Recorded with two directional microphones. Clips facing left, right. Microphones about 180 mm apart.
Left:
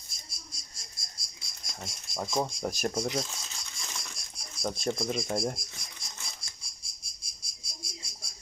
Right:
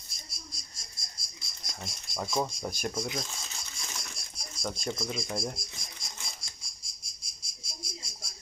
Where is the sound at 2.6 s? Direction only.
40° left (ahead or behind).